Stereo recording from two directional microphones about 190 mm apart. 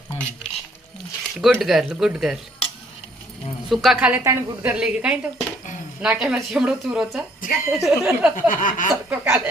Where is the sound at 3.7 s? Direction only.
Centre (ahead or behind).